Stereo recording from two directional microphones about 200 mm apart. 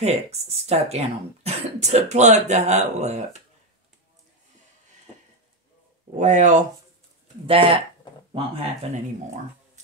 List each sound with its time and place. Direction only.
0.0 s speech: 30° right (ahead or behind)
6.1 s speech: 35° right (ahead or behind)
7.4 s speech: 25° right (ahead or behind)
8.9 s speech: 35° right (ahead or behind)